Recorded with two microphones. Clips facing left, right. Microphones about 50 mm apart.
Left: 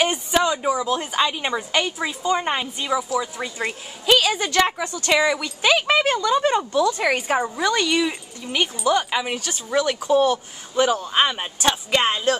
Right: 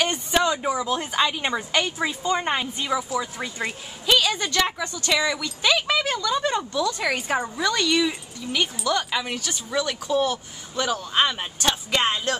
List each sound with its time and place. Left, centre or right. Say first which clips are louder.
0.0 s a woman's voice: left 2 dB; centre
10.2 s speech: left 5 dB; centre
10.8 s speech: left 4 dB; left